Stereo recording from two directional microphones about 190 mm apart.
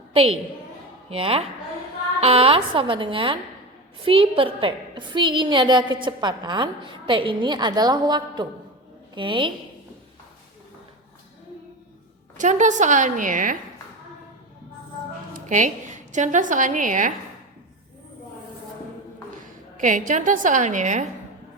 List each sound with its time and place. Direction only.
0.1 s a woman's voice: 30° right (ahead or behind)
12.4 s a woman's voice: 40° right (ahead or behind)
15.3 s a woman's voice: 40° right (ahead or behind)
19.7 s a woman's voice: 45° right (ahead or behind)